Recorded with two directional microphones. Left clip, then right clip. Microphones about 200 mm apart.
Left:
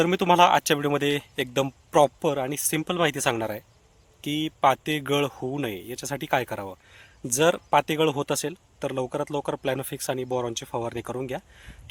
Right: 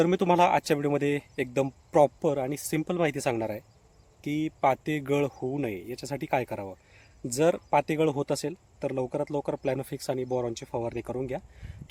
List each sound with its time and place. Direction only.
0.0 s speech: 10° right (ahead or behind)
5.3 s speech: 15° left (ahead or behind)
5.5 s speech: centre (ahead or behind)